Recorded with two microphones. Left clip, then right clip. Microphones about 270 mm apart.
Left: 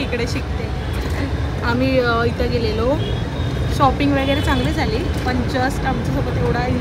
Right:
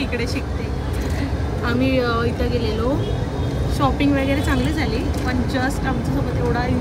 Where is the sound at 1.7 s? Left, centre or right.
Centre.